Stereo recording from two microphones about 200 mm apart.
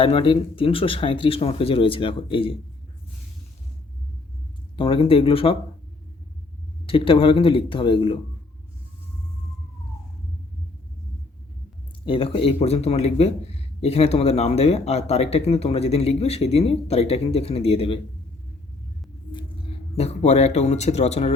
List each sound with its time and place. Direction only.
0.0 s speech: 25° left (ahead or behind)
4.8 s speech: 25° left (ahead or behind)
6.8 s speech: 25° left (ahead or behind)
12.0 s speech: 25° left (ahead or behind)
19.3 s speech: 25° left (ahead or behind)